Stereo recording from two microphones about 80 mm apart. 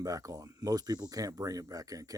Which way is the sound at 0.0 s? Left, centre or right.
Right.